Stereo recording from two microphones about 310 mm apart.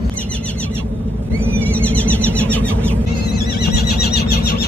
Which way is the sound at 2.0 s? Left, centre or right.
Centre.